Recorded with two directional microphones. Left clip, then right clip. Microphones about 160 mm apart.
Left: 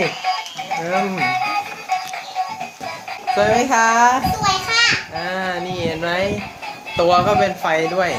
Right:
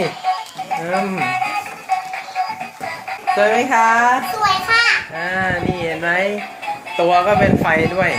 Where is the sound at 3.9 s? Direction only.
25° left (ahead or behind).